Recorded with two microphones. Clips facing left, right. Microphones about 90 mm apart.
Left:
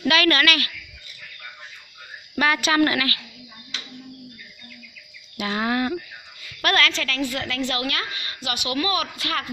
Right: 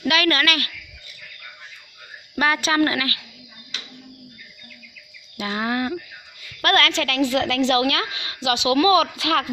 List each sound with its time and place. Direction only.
0.0 s a woman's voice: 15° right (ahead or behind)
2.3 s a woman's voice: 30° right (ahead or behind)
5.6 s a woman's voice: 15° right (ahead or behind)
6.6 s a woman's voice: 50° right (ahead or behind); by 9.5 s 90° right